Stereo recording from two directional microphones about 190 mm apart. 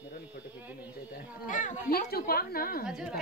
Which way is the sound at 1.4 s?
45° left (ahead or behind).